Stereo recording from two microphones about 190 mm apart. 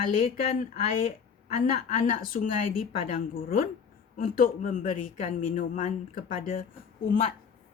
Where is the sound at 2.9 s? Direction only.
30° left (ahead or behind).